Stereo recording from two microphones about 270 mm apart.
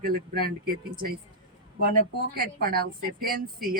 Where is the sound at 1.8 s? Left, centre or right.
Right.